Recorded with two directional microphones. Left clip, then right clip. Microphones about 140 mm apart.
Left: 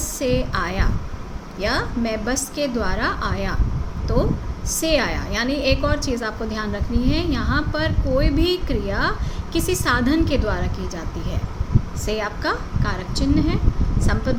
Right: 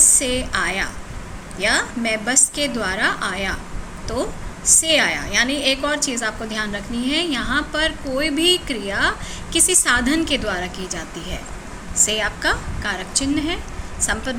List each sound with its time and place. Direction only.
0.2 s a woman's voice: 55° left (ahead or behind)
4.8 s a woman's voice: 55° left (ahead or behind)